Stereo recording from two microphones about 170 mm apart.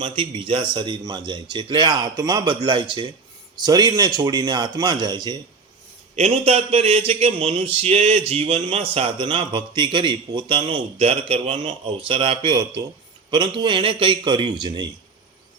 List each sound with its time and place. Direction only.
0.0 s a man's voice: 30° right (ahead or behind)
6.1 s a man's voice: 35° right (ahead or behind)